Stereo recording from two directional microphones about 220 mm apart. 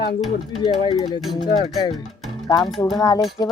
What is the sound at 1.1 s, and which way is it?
Speech, centre (ahead or behind).